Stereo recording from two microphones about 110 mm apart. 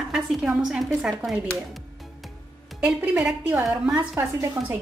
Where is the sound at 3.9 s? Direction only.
25° right (ahead or behind).